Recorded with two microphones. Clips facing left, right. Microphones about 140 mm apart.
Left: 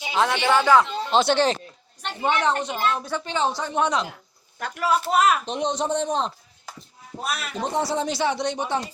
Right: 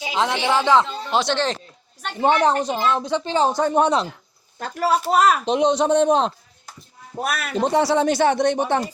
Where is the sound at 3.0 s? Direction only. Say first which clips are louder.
Right 6 dB; 20° right (ahead or behind).